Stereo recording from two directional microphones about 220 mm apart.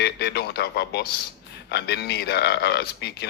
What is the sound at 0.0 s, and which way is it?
A man's voice, 50° left (ahead or behind).